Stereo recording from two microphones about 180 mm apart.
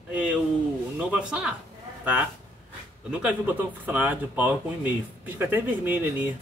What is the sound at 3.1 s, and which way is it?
Speech, 5° right (ahead or behind).